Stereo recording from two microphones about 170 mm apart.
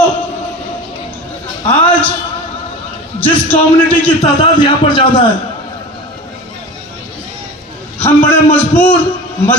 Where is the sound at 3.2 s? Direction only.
10° left (ahead or behind).